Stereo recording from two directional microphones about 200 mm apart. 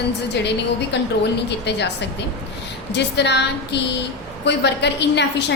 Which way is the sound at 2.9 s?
60° left (ahead or behind).